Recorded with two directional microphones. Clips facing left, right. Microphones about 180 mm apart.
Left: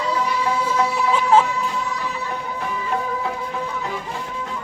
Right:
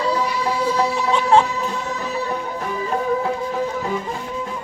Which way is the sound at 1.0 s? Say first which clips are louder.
Even; 5° left (ahead or behind).